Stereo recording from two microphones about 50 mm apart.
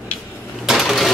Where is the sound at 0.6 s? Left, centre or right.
Centre.